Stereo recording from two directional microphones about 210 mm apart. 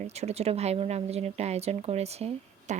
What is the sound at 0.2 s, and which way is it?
Speech, 30° right (ahead or behind).